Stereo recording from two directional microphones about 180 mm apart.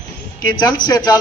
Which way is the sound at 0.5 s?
25° left (ahead or behind).